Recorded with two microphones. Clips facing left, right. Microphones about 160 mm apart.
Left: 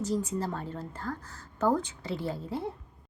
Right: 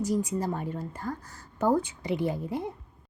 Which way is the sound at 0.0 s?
10° right (ahead or behind).